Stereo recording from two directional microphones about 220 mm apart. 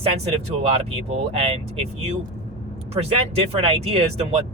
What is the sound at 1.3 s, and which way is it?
Speech, 25° right (ahead or behind).